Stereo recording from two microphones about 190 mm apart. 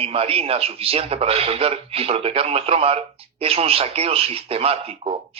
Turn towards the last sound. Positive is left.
turn(degrees=-30)  # may be behind; listen again after turning